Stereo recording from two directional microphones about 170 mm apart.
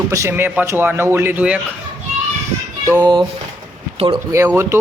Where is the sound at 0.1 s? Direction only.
15° right (ahead or behind).